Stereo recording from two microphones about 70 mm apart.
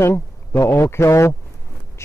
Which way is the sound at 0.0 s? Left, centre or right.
Left.